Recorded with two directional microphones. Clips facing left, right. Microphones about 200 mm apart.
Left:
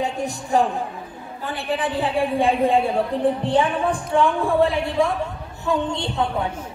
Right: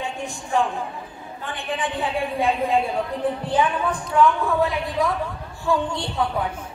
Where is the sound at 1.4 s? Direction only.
35° left (ahead or behind).